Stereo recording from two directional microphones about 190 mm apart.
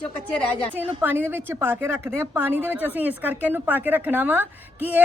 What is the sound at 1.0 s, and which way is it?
Speech, 10° right (ahead or behind).